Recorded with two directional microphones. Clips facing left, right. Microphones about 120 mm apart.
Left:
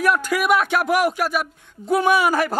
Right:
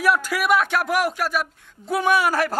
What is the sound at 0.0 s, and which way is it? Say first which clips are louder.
Speech: left 1 dB; 5° right (ahead or behind).